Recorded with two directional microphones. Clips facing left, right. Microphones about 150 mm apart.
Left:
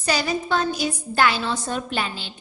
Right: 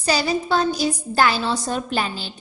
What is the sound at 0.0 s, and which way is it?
A woman's voice, 30° right (ahead or behind).